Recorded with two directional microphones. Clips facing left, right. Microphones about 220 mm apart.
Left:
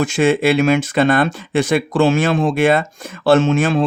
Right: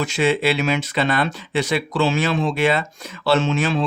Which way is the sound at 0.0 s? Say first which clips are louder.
Left 5 dB; 50° left (ahead or behind).